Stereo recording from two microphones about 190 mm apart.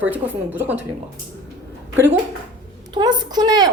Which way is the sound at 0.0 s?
10° right (ahead or behind).